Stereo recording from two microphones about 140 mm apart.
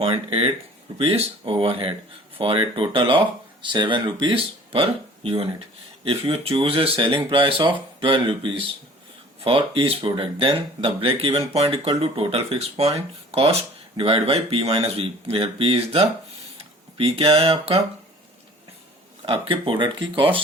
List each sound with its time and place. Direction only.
0.0 s speech: 45° right (ahead or behind)
19.2 s speech: 40° right (ahead or behind)